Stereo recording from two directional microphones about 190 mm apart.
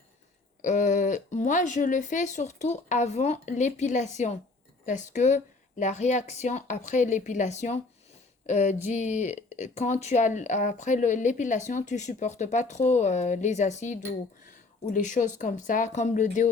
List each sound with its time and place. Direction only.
0.6 s speech: 40° left (ahead or behind)